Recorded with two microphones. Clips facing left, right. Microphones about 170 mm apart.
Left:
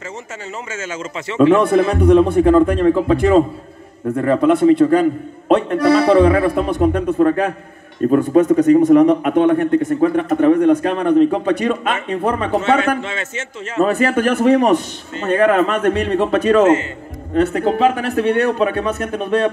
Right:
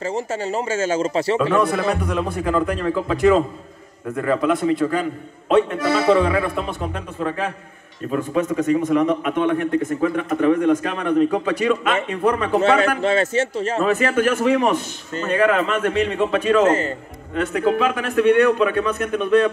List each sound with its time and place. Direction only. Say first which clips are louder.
0.1 s speech: right 7 dB; 35° right (ahead or behind)
1.4 s a man's voice: left 13 dB; 30° left (ahead or behind)
12.6 s speech: right 1 dB; 35° right (ahead or behind)
13.8 s a man's voice: left 2 dB; 40° left (ahead or behind)